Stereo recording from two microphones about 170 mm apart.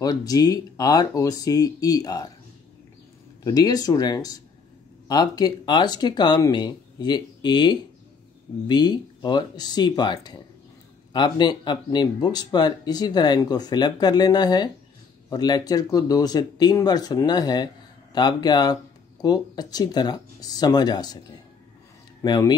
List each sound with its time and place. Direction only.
0.0 s speech: 20° left (ahead or behind)
3.4 s speech: 20° left (ahead or behind)
22.2 s speech: 25° left (ahead or behind)